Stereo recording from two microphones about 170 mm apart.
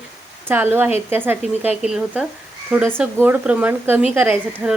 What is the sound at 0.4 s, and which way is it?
Speech, 10° right (ahead or behind).